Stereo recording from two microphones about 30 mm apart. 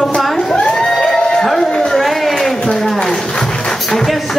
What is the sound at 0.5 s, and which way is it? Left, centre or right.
Crowd, left.